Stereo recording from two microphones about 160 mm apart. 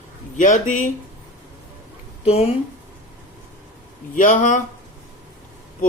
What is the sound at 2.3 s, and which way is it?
Speech, 40° left (ahead or behind).